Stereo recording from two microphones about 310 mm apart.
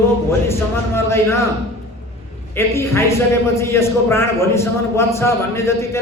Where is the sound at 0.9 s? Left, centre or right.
Centre.